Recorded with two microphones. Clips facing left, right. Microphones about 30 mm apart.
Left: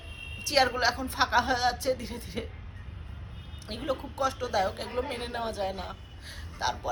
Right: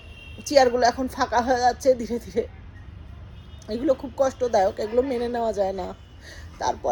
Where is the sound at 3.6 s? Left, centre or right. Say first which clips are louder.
Right 10 dB; left.